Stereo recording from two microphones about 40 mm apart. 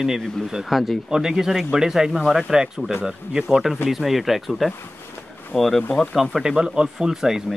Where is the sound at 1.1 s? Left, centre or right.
Centre.